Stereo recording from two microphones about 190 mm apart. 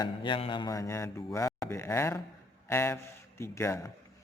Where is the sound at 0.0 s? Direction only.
25° left (ahead or behind).